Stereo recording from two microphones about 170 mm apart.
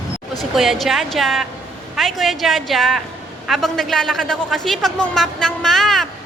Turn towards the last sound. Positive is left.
turn(degrees=0)  # may be behind; listen again after turning